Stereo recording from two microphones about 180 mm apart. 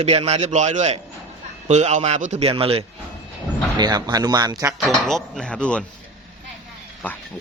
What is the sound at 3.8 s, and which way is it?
Speech, 20° right (ahead or behind).